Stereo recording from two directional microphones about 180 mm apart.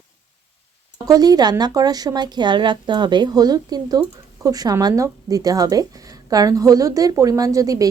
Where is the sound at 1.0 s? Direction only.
20° right (ahead or behind).